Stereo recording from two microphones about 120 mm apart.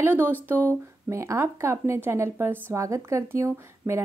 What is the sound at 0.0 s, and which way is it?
Speech, 15° right (ahead or behind).